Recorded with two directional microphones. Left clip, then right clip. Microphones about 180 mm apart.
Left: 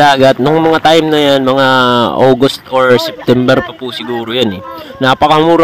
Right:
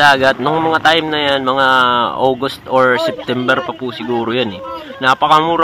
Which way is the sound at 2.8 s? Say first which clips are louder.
Left 3 dB; 55° left (ahead or behind).